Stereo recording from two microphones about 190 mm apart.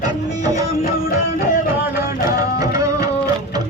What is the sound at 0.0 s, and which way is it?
Music, 20° right (ahead or behind).